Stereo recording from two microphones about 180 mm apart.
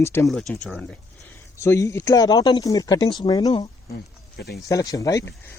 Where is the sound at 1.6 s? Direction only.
15° left (ahead or behind).